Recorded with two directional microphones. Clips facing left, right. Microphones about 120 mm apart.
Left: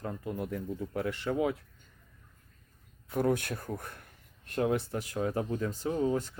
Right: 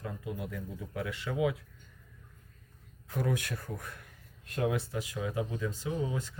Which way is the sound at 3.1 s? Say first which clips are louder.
Left 4 dB; 50° left (ahead or behind).